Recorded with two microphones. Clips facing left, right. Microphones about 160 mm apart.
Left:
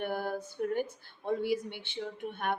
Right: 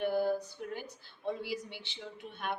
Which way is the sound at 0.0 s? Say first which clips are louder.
Right 3 dB; 55° left (ahead or behind).